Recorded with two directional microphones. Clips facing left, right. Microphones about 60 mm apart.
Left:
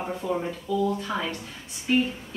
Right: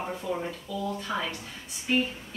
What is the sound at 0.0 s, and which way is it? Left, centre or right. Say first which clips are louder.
A woman's voice: left 3 dB; centre.